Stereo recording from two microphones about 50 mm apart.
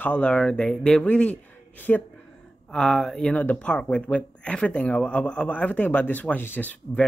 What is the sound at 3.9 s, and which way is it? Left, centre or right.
Speech, left.